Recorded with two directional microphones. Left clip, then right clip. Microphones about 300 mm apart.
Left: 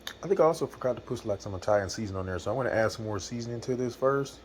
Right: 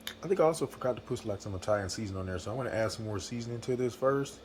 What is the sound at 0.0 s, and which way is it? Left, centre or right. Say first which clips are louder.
Speech: left 3 dB; centre.